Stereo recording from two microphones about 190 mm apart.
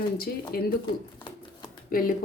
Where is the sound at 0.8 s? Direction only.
25° left (ahead or behind).